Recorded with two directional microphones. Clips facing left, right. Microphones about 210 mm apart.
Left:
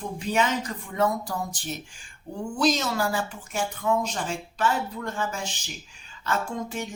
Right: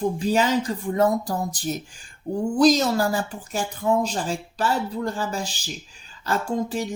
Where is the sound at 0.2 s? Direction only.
35° right (ahead or behind).